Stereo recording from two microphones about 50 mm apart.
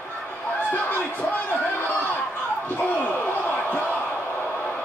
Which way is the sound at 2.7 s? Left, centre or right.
Left.